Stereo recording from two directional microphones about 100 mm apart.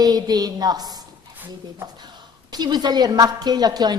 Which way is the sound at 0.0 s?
40° right (ahead or behind).